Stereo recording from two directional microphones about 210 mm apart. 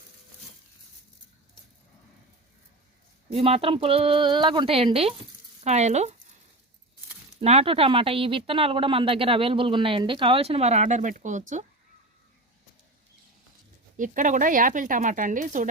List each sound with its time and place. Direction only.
3.2 s speech: 25° right (ahead or behind)
7.4 s speech: 30° right (ahead or behind)
13.9 s speech: 35° right (ahead or behind)